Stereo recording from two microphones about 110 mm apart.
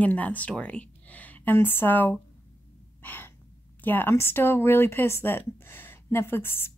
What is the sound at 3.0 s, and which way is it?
Gasp, 15° left (ahead or behind).